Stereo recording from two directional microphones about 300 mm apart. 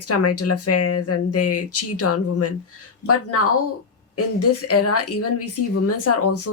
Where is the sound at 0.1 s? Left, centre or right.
Left.